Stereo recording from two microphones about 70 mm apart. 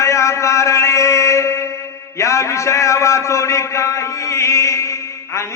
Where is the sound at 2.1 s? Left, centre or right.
Left.